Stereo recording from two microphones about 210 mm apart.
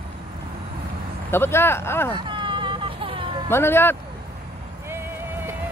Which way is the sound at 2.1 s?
20° right (ahead or behind).